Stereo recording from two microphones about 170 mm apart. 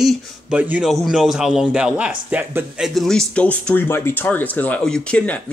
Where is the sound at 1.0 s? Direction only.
Centre (ahead or behind).